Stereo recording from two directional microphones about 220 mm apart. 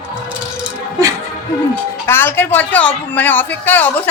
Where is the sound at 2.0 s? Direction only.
10° left (ahead or behind).